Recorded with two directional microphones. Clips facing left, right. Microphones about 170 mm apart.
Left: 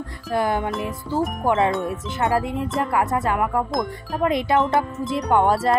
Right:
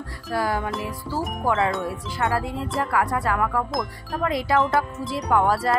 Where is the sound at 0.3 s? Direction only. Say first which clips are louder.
Left 3 dB; 25° left (ahead or behind).